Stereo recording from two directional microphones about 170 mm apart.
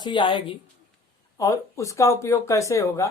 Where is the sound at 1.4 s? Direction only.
20° left (ahead or behind).